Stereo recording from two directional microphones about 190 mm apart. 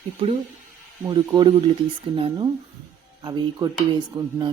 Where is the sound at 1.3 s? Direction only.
20° right (ahead or behind).